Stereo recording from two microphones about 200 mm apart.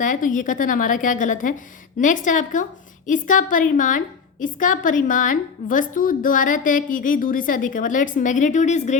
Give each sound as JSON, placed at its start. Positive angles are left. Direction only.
{"t": 0.0, "sound": "a woman's voice", "side_deg": 40}